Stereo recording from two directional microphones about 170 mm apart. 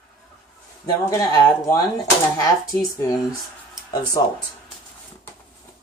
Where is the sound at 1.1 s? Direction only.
20° left (ahead or behind).